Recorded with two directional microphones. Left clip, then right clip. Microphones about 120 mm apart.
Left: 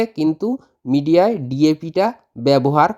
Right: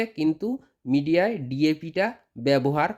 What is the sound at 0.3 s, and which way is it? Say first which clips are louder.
Speech: left 8 dB; 30° left (ahead or behind).